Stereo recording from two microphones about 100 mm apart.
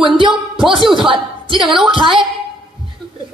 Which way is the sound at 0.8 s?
Centre (ahead or behind).